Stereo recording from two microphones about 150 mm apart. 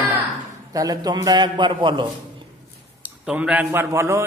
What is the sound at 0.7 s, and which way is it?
A man's voice, 25° right (ahead or behind).